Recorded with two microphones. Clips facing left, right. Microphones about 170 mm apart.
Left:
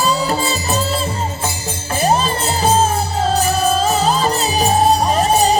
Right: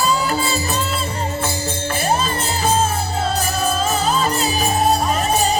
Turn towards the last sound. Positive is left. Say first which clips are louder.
# left 4 dB
turn(degrees=35)  # may be behind; listen again after turning